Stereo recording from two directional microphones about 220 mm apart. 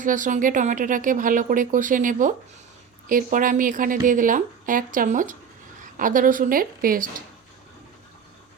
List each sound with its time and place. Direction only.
0.0 s speech: 35° right (ahead or behind)